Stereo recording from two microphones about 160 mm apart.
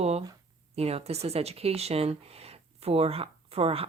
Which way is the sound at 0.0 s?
40° right (ahead or behind).